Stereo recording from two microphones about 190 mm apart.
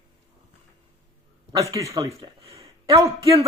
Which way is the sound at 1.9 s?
20° right (ahead or behind).